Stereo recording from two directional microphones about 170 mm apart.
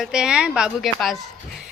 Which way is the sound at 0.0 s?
5° right (ahead or behind).